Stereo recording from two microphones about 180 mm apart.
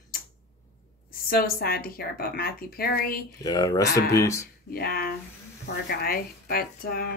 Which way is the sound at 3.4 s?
20° left (ahead or behind).